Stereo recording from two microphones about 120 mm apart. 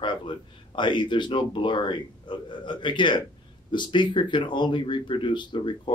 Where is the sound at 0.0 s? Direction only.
40° left (ahead or behind).